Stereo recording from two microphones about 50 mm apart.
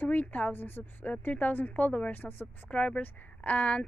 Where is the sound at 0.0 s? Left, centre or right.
Left.